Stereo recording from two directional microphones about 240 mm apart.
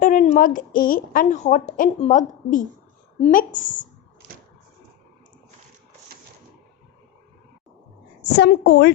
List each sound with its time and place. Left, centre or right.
0.0 s a woman's voice: left
8.2 s a woman's voice: left